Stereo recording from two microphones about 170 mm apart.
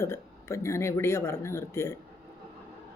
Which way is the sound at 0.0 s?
15° left (ahead or behind).